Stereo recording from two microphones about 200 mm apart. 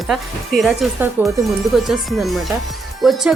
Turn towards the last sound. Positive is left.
turn(degrees=0)  # may be behind; listen again after turning